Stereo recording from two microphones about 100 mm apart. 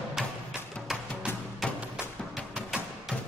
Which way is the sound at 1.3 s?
20° left (ahead or behind).